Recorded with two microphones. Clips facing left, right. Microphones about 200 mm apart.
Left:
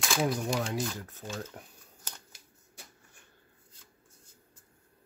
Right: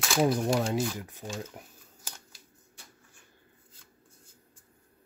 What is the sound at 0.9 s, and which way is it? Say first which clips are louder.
Speech: right 1 dB; 15° right (ahead or behind).